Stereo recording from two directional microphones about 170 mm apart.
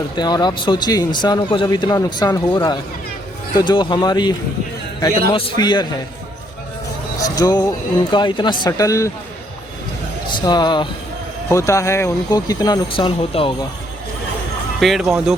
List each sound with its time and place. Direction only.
0.2 s speech: 25° left (ahead or behind)
7.2 s a sound: 20° left (ahead or behind)
8.1 s speech: 25° left (ahead or behind)
10.2 s speech: 25° left (ahead or behind)
14.8 s speech: centre (ahead or behind)